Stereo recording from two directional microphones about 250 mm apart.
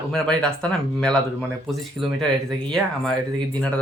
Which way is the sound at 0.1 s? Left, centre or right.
Centre.